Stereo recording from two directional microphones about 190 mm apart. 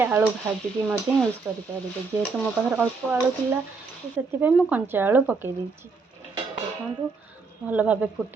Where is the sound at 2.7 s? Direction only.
10° right (ahead or behind).